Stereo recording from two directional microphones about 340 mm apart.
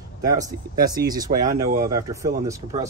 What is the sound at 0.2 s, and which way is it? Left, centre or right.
Speech, centre.